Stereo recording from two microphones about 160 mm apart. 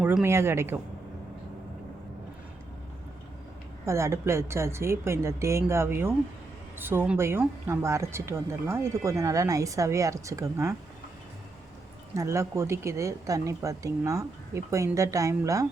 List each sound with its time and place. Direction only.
0.0 s speech: 10° right (ahead or behind)
3.8 s speech: 15° right (ahead or behind)
12.1 s speech: 20° right (ahead or behind)